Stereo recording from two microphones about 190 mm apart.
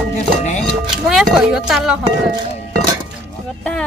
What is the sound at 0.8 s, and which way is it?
Speech, 5° right (ahead or behind).